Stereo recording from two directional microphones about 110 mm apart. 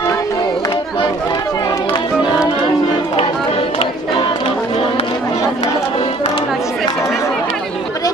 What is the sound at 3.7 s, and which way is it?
Music, 55° left (ahead or behind).